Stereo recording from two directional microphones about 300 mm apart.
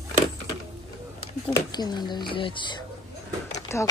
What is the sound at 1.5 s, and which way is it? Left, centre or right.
Speech, centre.